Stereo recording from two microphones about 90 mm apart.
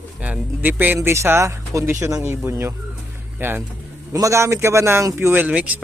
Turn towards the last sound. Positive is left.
turn(degrees=-15)  # may be behind; listen again after turning